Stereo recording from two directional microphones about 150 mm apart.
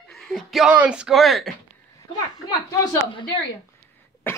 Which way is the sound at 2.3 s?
25° left (ahead or behind).